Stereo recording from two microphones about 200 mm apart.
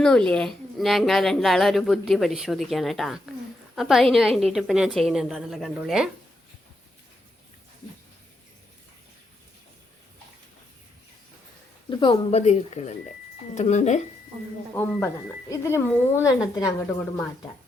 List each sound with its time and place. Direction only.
0.0 s speech: 5° left (ahead or behind)
11.9 s speech: 25° left (ahead or behind)
14.8 s speech: 15° left (ahead or behind)